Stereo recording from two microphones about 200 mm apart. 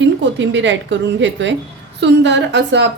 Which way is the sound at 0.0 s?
65° right (ahead or behind).